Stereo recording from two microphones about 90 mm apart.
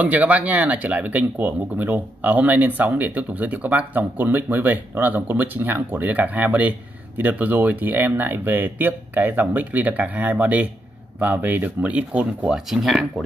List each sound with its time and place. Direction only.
0.0 s speech: 15° right (ahead or behind)